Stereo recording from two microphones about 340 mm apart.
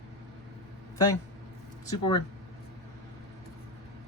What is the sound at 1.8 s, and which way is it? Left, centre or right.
Speech, centre.